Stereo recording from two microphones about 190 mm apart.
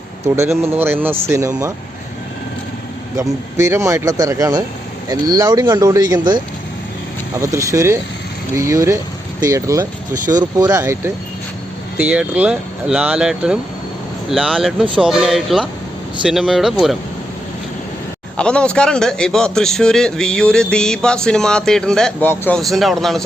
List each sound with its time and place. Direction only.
0.6 s speech: 10° right (ahead or behind)
3.2 s a man's voice: 15° right (ahead or behind)
18.3 s a man's voice: 5° left (ahead or behind)